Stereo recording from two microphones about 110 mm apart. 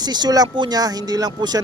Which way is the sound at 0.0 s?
40° right (ahead or behind).